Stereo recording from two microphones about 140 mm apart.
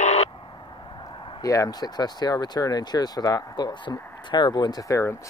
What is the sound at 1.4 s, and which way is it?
Speech, 25° left (ahead or behind).